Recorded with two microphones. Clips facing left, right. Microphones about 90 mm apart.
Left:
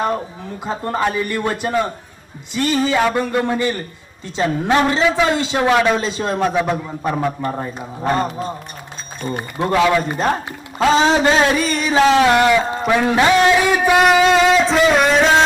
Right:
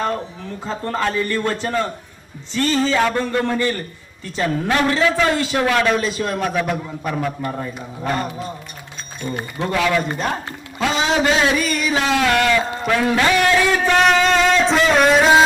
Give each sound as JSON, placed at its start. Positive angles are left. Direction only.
{"t": 0.6, "sound": "a man's voice", "side_deg": 15}
{"t": 10.8, "sound": "a sound", "side_deg": 30}
{"t": 12.2, "sound": "a man's voice", "side_deg": 20}